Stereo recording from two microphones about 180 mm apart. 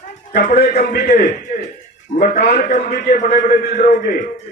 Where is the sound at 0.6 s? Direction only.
55° left (ahead or behind).